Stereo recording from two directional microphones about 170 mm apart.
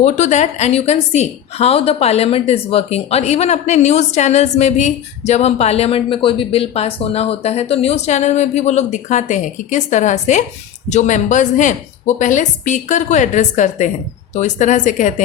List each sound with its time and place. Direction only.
0.0 s a woman's voice: 45° left (ahead or behind)